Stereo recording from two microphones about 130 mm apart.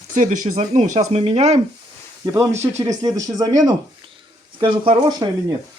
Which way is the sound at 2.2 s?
20° right (ahead or behind).